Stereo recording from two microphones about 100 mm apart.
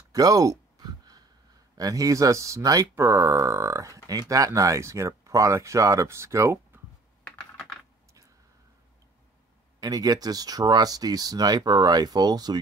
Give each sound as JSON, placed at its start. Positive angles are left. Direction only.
{"t": 0.1, "sound": "a sound", "side_deg": -35}
{"t": 1.8, "sound": "speech", "side_deg": -35}
{"t": 7.2, "sound": "computer keyboard", "side_deg": 5}
{"t": 9.8, "sound": "speech", "side_deg": -40}